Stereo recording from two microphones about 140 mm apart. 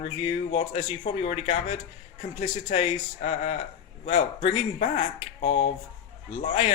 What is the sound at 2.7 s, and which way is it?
Speech, 45° left (ahead or behind).